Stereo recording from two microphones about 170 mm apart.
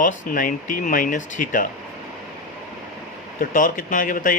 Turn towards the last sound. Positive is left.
turn(degrees=55)  # may be behind; listen again after turning